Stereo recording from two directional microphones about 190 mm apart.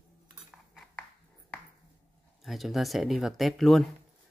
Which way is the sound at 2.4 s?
Centre (ahead or behind).